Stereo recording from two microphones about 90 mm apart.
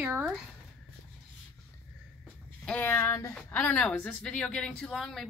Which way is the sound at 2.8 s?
30° left (ahead or behind).